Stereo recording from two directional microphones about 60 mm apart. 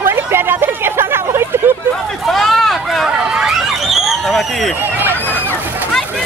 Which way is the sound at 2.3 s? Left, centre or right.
Centre.